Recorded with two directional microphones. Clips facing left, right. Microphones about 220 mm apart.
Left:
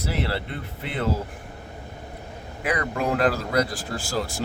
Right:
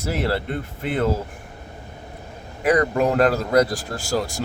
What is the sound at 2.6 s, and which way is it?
Speech, 40° right (ahead or behind).